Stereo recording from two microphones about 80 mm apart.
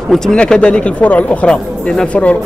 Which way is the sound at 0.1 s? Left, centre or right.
Centre.